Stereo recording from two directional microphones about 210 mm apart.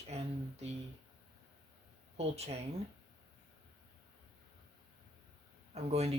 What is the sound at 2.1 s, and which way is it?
Speech, 30° right (ahead or behind).